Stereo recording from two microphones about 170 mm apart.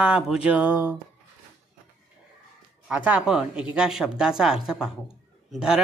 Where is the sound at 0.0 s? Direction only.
5° right (ahead or behind).